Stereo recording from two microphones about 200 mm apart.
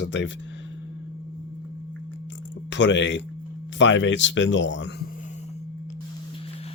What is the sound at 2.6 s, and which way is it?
Speech, 60° left (ahead or behind).